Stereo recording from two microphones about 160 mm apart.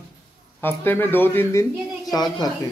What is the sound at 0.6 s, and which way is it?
Speech, 15° left (ahead or behind).